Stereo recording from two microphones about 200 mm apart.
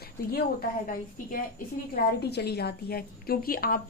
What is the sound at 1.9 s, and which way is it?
A woman's voice, 55° left (ahead or behind).